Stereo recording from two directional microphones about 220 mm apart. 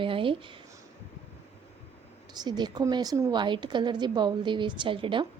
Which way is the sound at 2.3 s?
20° right (ahead or behind).